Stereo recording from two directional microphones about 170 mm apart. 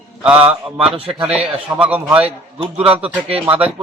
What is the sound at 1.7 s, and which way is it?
Speech, 10° right (ahead or behind).